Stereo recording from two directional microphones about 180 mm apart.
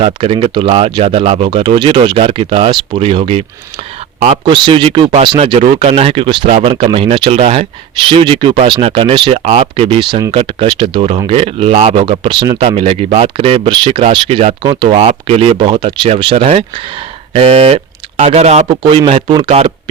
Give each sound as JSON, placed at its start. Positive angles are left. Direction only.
{"t": 0.0, "sound": "speech", "side_deg": -30}